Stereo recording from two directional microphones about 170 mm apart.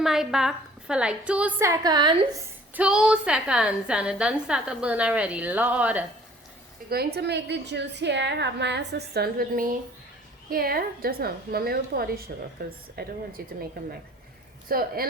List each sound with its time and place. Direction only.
0.0 s a woman's voice: 5° right (ahead or behind); by 2.1 s 25° right (ahead or behind)
2.7 s a woman's voice: 5° right (ahead or behind)
6.9 s a woman's voice: 70° right (ahead or behind)
14.7 s a woman's voice: 60° right (ahead or behind)